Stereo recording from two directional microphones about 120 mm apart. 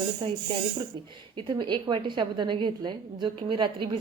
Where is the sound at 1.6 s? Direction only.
40° right (ahead or behind).